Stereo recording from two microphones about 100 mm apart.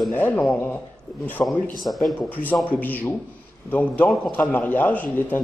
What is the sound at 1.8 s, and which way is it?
Speech, centre (ahead or behind).